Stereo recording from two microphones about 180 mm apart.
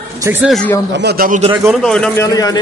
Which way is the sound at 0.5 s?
5° left (ahead or behind).